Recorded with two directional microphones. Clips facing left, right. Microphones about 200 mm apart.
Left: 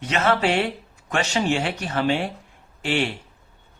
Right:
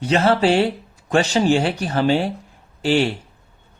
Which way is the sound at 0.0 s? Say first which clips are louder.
Right 5 dB; 35° right (ahead or behind).